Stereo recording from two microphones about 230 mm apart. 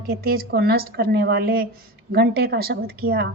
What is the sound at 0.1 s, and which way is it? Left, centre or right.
A woman's voice, right.